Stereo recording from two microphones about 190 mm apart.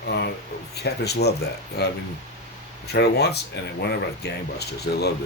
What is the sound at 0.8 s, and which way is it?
Speech, 60° left (ahead or behind).